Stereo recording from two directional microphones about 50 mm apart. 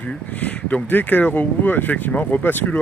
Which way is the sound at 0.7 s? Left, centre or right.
Left.